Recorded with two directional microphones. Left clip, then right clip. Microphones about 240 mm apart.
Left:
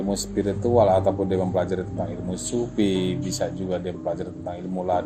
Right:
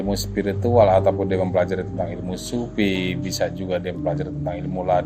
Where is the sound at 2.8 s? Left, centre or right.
Right.